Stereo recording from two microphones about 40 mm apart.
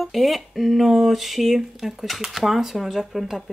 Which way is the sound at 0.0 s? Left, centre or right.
Centre.